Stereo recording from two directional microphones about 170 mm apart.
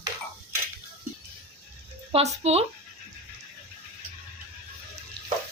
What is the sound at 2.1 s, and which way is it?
Speech, 40° right (ahead or behind).